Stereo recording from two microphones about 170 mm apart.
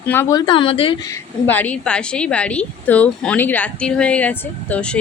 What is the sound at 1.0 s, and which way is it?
A woman's voice, 10° left (ahead or behind).